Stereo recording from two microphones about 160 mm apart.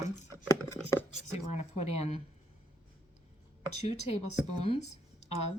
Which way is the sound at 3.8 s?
40° left (ahead or behind).